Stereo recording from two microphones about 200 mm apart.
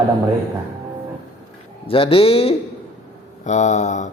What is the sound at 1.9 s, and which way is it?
A man's voice, 25° left (ahead or behind).